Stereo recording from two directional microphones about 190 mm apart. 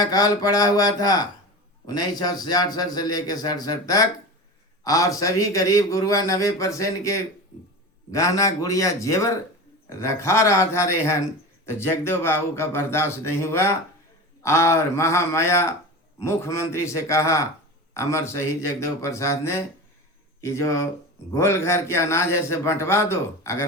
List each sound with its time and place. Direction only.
0.0 s a man's voice: 20° left (ahead or behind)
8.1 s a man's voice: 15° left (ahead or behind)